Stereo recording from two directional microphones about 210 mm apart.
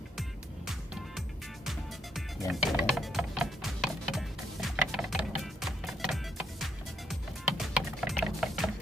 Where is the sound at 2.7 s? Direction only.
Centre (ahead or behind).